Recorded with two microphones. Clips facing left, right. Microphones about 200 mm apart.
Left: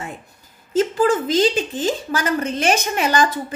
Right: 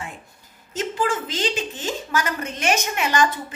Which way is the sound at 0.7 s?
45° left (ahead or behind).